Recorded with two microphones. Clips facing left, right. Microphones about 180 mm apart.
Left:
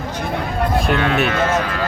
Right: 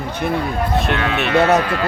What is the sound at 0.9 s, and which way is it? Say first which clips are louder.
Speech: left 2 dB; centre (ahead or behind).